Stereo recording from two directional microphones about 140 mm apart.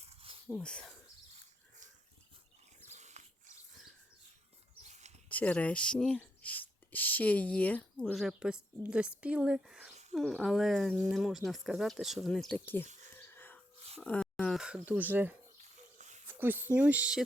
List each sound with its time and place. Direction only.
0.0 s a sound: 45° right (ahead or behind)
0.4 s speech: 10° left (ahead or behind)
1.3 s livestock: 60° right (ahead or behind)
2.8 s dog: 55° right (ahead or behind)
4.8 s a sound: 55° right (ahead or behind)
5.3 s speech: 10° left (ahead or behind)
12.8 s speech: 60° right (ahead or behind)
13.1 s a sound: 15° left (ahead or behind)
14.0 s speech: 10° left (ahead or behind)
14.8 s speech: 10° right (ahead or behind)
16.0 s a sound: 60° right (ahead or behind)
16.2 s speech: 15° right (ahead or behind)